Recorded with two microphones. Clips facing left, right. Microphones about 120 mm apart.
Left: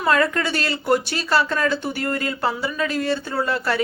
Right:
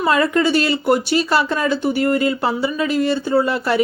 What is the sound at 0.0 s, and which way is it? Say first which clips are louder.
Speech: right 4 dB; 10° right (ahead or behind).